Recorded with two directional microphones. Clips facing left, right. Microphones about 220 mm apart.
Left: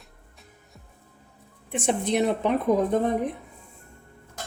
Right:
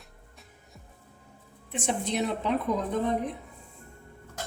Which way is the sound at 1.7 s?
55° left (ahead or behind).